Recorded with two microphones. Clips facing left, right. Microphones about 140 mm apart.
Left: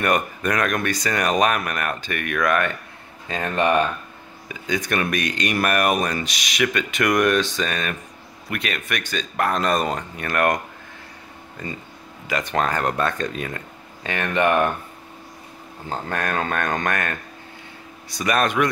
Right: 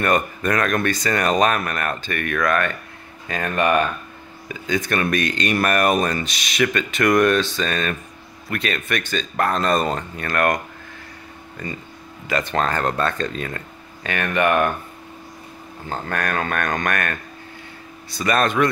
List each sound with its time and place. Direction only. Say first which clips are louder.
0.0 s speech: right 1 dB; 10° left (ahead or behind)
12.3 s speech: right 1 dB; 10° left (ahead or behind)
15.9 s speech: right 1 dB; 20° left (ahead or behind)